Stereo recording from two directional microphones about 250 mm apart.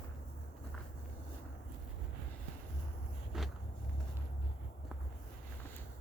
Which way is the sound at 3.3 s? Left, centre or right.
Centre.